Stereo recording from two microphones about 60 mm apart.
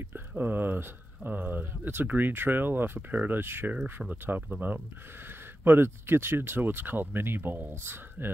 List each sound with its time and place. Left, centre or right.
0.4 s speech: right
4.1 s speech: right